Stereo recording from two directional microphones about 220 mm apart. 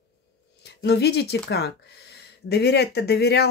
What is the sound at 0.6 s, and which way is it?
Speech, 50° left (ahead or behind).